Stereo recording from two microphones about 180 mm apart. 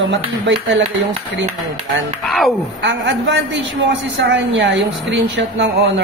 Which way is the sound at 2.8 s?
80° right.